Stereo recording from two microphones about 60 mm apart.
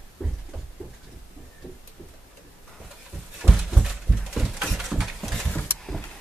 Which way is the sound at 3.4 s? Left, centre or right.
Centre.